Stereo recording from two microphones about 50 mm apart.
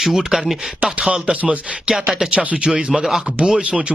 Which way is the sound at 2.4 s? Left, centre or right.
Right.